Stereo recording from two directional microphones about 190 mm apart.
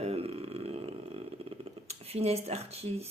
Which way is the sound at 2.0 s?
30° right (ahead or behind).